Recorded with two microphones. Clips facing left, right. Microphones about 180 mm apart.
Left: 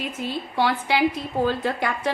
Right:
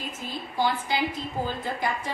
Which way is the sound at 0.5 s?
70° left (ahead or behind).